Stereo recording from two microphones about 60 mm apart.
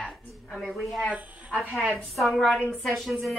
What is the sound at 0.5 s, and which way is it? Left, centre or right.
A woman's voice, centre.